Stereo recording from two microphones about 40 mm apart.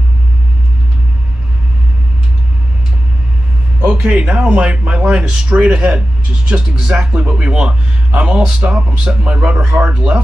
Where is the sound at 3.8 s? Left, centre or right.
Right.